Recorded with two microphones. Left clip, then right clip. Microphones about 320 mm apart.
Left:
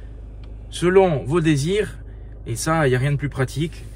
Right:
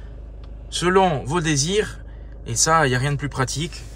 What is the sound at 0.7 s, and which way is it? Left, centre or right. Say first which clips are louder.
Speech: left 1 dB; centre.